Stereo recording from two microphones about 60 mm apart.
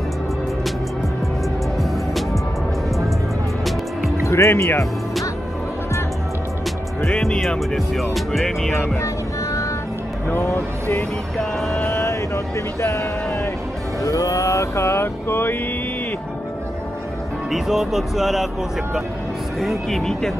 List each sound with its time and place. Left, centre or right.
4.3 s speech: left
7.2 s speech: centre
9.0 s music: left
10.4 s speech: left
11.3 s music: centre
11.8 s vehicle: left
14.0 s vehicle: left
17.5 s speech: centre
19.6 s speech: centre